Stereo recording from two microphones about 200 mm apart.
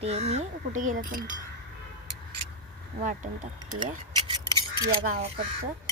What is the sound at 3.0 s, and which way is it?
Speech, 40° right (ahead or behind).